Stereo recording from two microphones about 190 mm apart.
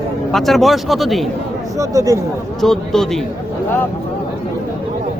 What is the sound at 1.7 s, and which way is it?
Speech, 15° right (ahead or behind).